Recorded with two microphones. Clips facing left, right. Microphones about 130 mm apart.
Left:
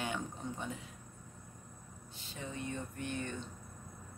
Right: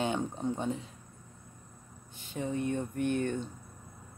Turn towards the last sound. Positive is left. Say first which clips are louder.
# right 10 dB
turn(degrees=-55)  # may be behind; listen again after turning